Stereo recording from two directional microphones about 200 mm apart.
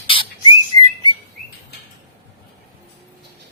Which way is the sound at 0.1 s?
25° left (ahead or behind).